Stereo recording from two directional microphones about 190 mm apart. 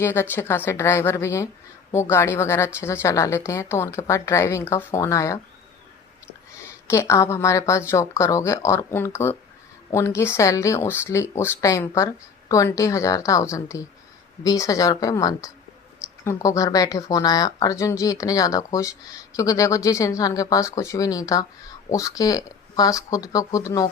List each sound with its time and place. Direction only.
0.0 s speech: 10° left (ahead or behind)
6.8 s speech: 15° left (ahead or behind)